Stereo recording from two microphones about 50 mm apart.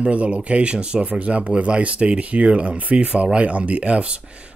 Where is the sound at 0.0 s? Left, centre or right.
Right.